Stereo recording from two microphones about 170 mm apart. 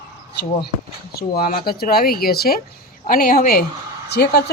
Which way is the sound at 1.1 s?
65° left (ahead or behind).